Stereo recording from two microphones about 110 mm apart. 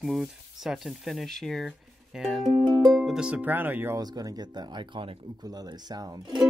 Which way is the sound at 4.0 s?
35° right (ahead or behind).